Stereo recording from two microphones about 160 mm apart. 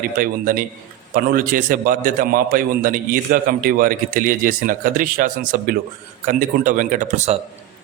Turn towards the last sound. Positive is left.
turn(degrees=-45)  # may be behind; listen again after turning